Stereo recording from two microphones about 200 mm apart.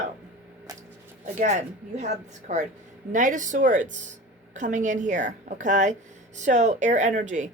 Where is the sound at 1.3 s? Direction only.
35° right (ahead or behind).